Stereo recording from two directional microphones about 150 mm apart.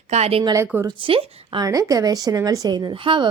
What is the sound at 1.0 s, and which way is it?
Speech, 35° right (ahead or behind).